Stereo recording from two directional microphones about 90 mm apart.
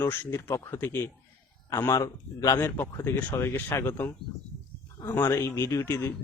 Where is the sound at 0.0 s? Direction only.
25° left (ahead or behind).